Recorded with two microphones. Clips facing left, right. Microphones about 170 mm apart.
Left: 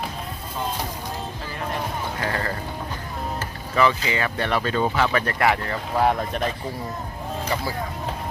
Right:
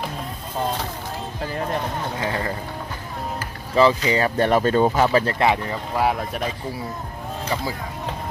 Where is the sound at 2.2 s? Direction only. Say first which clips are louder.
Right 1 dB; 15° right (ahead or behind).